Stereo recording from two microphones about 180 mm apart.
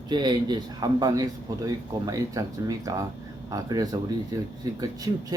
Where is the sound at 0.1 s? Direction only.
25° right (ahead or behind).